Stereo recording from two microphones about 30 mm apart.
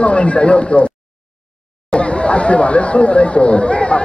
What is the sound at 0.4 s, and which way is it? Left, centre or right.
Speech, left.